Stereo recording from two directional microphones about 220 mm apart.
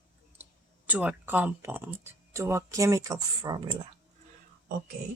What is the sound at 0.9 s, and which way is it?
Speech, 5° right (ahead or behind).